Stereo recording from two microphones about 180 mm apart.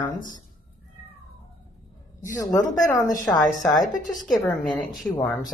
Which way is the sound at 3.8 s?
45° left (ahead or behind).